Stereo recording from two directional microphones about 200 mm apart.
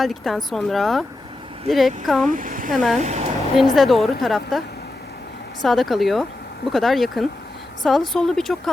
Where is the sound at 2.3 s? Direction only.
40° right (ahead or behind).